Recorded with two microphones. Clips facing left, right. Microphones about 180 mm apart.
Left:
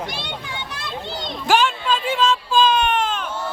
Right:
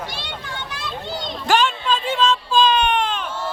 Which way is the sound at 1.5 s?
10° left (ahead or behind).